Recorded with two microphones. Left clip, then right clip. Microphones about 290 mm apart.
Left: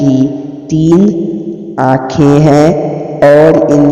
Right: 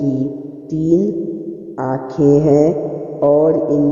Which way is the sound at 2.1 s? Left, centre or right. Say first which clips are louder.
Left 2 dB; left.